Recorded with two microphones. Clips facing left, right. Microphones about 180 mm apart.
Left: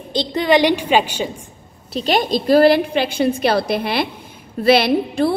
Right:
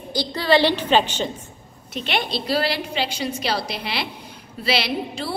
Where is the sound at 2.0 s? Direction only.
40° left (ahead or behind).